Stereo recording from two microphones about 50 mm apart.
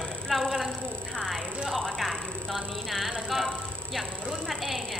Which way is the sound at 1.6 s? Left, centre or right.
Centre.